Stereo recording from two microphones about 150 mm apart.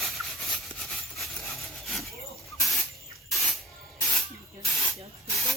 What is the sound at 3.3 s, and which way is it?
Spray, centre (ahead or behind).